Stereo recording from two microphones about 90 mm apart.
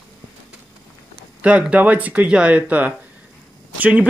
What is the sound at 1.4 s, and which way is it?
Speech, 15° right (ahead or behind).